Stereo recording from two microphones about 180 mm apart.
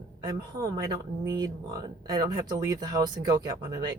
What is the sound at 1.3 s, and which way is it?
Speech, 20° right (ahead or behind).